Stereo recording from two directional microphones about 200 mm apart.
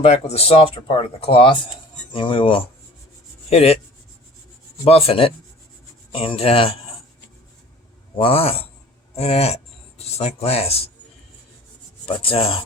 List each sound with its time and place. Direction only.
0.0 s speech: 30° left (ahead or behind)
4.9 s speech: 30° left (ahead or behind)
8.2 s speech: 30° left (ahead or behind)
12.0 s speech: 30° left (ahead or behind)